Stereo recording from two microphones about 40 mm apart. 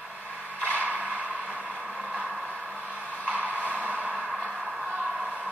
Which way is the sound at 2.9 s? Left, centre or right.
Right.